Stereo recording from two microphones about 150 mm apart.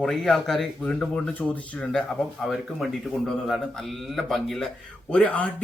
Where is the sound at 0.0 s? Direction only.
5° left (ahead or behind).